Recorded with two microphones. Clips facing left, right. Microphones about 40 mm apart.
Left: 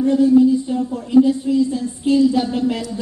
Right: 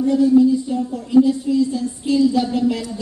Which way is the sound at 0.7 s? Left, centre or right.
Left.